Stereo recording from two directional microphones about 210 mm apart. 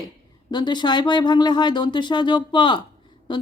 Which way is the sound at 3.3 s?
20° left (ahead or behind).